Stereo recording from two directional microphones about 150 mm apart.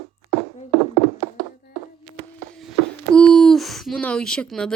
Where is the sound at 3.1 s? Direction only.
5° left (ahead or behind).